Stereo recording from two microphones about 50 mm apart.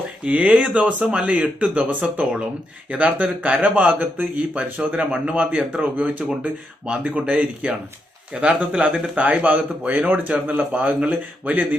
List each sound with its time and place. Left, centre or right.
0.3 s speech: right
4.9 s speech: right